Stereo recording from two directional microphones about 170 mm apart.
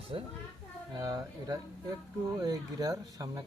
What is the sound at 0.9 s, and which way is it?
Speech, 25° right (ahead or behind).